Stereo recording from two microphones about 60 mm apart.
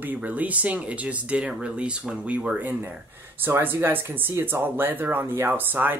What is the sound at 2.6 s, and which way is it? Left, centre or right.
Speech, right.